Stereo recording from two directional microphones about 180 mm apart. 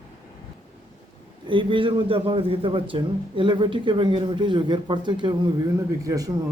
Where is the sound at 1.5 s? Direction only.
25° right (ahead or behind).